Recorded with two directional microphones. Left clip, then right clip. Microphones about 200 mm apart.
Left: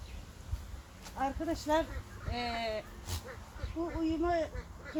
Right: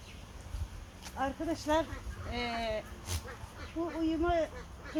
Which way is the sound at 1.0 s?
15° right (ahead or behind).